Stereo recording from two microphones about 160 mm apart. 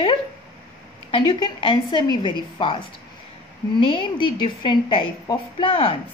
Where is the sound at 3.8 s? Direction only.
30° left (ahead or behind).